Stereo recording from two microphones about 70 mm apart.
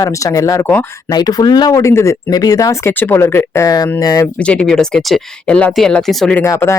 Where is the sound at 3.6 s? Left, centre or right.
Left.